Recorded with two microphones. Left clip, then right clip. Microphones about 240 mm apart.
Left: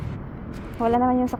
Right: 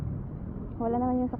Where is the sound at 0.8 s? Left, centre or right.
Left.